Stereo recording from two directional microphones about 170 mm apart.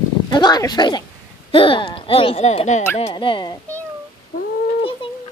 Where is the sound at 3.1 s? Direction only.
30° left (ahead or behind).